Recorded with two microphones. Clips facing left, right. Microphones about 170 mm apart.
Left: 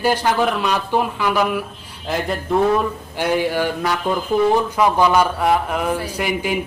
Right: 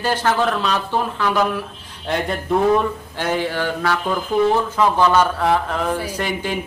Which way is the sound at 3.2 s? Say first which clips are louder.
Left 3 dB; 10° left (ahead or behind).